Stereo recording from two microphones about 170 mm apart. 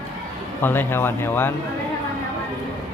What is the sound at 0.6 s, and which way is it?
Speech, 10° left (ahead or behind).